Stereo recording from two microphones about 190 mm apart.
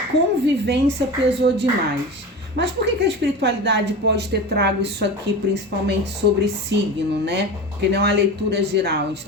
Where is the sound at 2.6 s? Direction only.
65° right (ahead or behind).